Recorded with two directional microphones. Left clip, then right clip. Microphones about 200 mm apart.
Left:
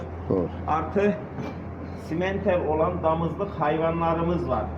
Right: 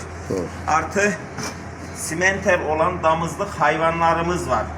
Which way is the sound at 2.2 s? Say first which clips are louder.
Right 6 dB; 10° right (ahead or behind).